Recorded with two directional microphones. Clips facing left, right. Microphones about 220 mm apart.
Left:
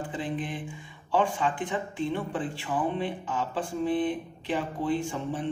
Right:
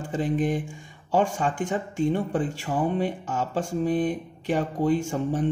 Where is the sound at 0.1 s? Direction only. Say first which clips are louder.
Right 12 dB; 45° right (ahead or behind).